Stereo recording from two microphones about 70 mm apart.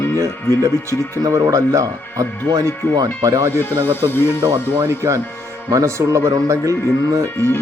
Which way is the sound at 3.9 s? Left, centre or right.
Left.